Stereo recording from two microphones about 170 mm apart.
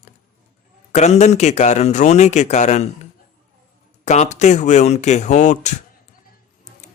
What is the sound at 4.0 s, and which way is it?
Speech, 45° left (ahead or behind).